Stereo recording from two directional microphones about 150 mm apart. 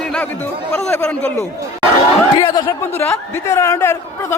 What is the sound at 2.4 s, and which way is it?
Speech, 30° left (ahead or behind).